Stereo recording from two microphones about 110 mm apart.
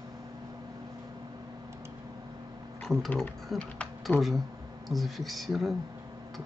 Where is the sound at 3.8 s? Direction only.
Centre (ahead or behind).